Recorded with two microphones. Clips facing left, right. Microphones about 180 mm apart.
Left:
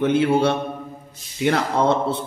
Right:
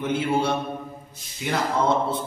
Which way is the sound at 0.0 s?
65° left (ahead or behind).